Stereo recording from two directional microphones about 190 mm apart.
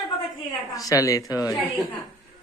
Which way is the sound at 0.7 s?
15° left (ahead or behind).